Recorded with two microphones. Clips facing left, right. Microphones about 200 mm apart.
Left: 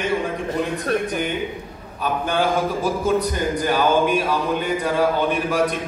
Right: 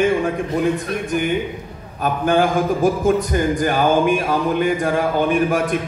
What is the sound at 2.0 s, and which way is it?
A man's voice, 50° right (ahead or behind).